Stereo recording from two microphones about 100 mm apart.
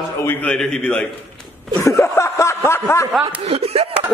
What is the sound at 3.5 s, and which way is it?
Speech, 90° right.